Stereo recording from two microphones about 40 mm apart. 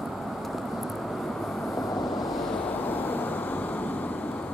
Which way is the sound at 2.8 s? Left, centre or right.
Left.